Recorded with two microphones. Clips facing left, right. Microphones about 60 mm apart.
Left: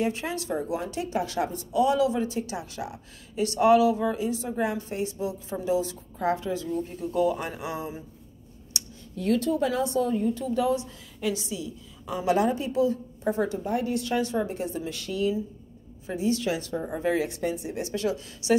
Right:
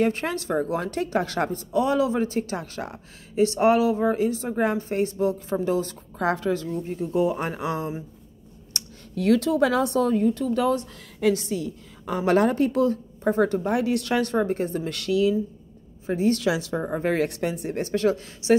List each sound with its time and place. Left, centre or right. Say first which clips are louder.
0.0 s a woman's voice: right 4 dB; right
2.1 s a woman's voice: right 4 dB; right
3.3 s a woman's voice: right 1 dB; right
6.1 s a woman's voice: right 3 dB; right
6.5 s a woman's voice: right 2 dB; right
7.0 s a woman's voice: right 2 dB; right
8.7 s a sound: right 1 dB; right
9.1 s a woman's voice: right 4 dB; right
13.7 s a woman's voice: right 4 dB; right
14.9 s a woman's voice: right 7 dB; right
16.1 s a woman's voice: right 4 dB; right
16.3 s a woman's voice: right 4 dB; right
16.8 s a woman's voice: right 2 dB; right